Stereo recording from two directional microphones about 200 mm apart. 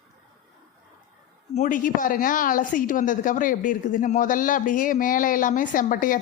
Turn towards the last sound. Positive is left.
turn(degrees=40)  # may be behind; listen again after turning